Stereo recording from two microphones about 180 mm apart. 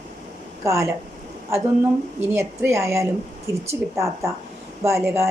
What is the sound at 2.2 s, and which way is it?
Speech, 15° right (ahead or behind).